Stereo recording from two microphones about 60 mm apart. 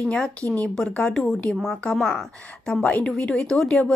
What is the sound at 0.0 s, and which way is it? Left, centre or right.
Speech, centre.